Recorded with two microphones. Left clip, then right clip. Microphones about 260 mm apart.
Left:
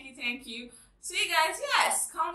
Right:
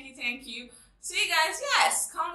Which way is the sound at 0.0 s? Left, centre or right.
Centre.